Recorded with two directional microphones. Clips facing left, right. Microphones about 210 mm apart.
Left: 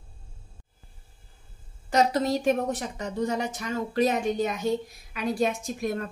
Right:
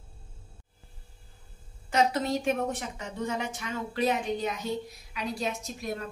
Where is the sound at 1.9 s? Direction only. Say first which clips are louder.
Left 3 dB; 40° left (ahead or behind).